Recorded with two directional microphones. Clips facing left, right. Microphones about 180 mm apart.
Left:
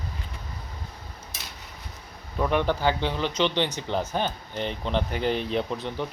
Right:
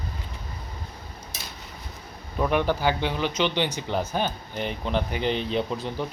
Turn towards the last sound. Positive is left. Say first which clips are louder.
# right 1 dB
turn(degrees=-5)  # may be behind; listen again after turning